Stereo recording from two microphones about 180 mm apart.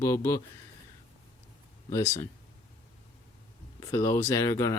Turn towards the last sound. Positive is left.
turn(degrees=15)  # may be behind; listen again after turning